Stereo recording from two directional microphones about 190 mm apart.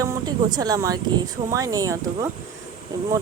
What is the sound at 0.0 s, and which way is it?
Speech, 20° right (ahead or behind).